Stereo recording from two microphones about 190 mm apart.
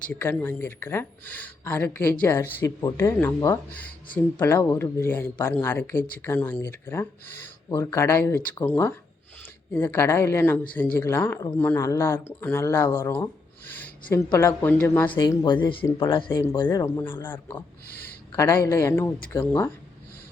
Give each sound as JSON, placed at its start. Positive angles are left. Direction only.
{"t": 0.1, "sound": "speech", "side_deg": 10}
{"t": 13.7, "sound": "a sound", "side_deg": 10}
{"t": 14.3, "sound": "speech", "side_deg": 15}
{"t": 15.1, "sound": "speech", "side_deg": 20}